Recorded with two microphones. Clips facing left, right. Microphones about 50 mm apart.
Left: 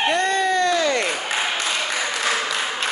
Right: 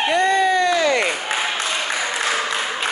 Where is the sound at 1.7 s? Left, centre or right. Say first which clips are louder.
Right 1 dB; centre.